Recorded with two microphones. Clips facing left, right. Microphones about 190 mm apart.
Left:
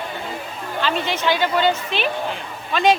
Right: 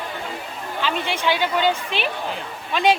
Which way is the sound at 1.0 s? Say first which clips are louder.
Even; 10° right (ahead or behind).